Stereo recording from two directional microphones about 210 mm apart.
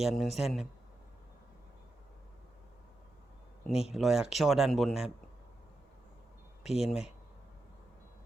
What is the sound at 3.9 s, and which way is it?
Speech, centre (ahead or behind).